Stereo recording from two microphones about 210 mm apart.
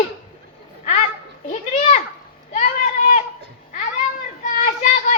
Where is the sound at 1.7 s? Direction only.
35° left (ahead or behind).